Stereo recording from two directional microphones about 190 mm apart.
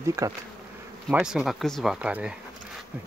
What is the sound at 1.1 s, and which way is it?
Speech, 5° right (ahead or behind).